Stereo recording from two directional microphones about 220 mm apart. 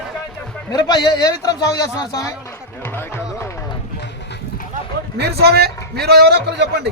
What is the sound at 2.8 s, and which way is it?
Music, 10° left (ahead or behind).